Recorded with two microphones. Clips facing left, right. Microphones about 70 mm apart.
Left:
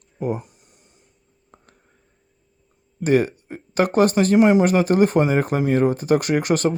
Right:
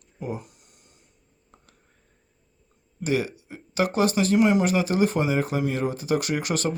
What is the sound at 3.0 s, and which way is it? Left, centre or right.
Speech, left.